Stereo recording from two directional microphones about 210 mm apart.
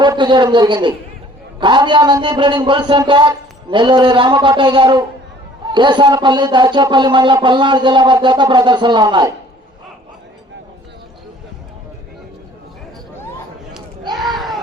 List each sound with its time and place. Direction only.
0.0 s a man's voice: 20° right (ahead or behind)